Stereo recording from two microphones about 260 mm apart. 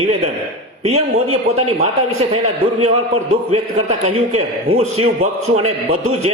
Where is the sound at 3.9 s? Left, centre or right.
Right.